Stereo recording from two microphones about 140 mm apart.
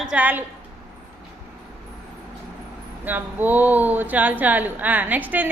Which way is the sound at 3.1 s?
15° right (ahead or behind).